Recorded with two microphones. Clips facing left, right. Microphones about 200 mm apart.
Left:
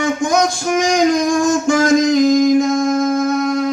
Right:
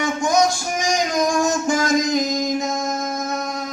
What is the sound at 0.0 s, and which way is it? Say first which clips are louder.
Music: left 3 dB; 50° left (ahead or behind).